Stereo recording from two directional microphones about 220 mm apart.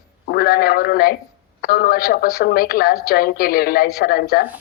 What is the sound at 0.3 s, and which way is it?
A man's voice, 45° left (ahead or behind).